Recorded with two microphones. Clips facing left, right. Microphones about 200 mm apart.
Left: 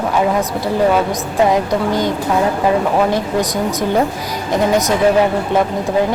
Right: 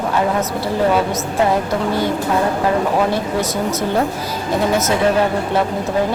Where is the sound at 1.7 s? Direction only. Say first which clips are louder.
Left 2 dB; 15° left (ahead or behind).